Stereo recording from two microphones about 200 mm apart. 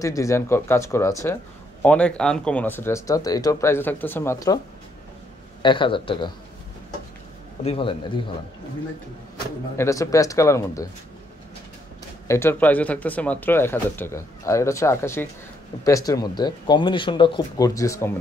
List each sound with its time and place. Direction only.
0.0 s speech: 15° left (ahead or behind)
5.6 s speech: 25° left (ahead or behind)
7.6 s speech: 25° left (ahead or behind)
9.8 s speech: 15° left (ahead or behind)
12.3 s speech: 10° left (ahead or behind)